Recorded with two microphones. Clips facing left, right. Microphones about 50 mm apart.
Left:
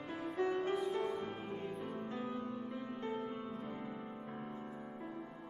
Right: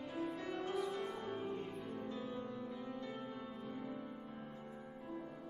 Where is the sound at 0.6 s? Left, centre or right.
Left.